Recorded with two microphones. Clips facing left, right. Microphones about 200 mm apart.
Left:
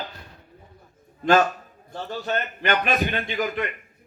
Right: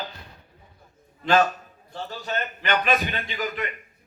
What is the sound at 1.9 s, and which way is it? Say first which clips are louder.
A man's voice: left 3 dB; 50° left (ahead or behind).